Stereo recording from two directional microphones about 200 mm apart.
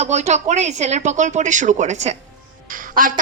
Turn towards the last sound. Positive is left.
turn(degrees=-45)  # may be behind; listen again after turning